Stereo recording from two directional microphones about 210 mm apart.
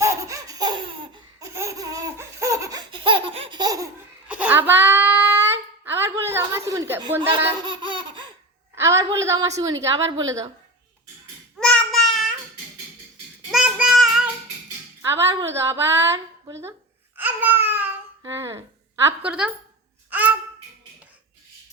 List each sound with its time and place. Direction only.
0.0 s laughter: 15° right (ahead or behind)
4.3 s a sound: 5° right (ahead or behind)
6.9 s a woman's voice: 10° right (ahead or behind)
7.2 s speech: 25° right (ahead or behind)
7.6 s laughter: 20° right (ahead or behind)
8.7 s a woman's voice: 15° right (ahead or behind)
11.6 s child singing: 5° left (ahead or behind)
13.5 s child singing: 5° right (ahead or behind)
15.0 s a woman's voice: 10° right (ahead or behind)
17.2 s babbling: 10° right (ahead or behind)
18.2 s a woman's voice: 15° right (ahead or behind)
20.1 s a sound: 10° right (ahead or behind)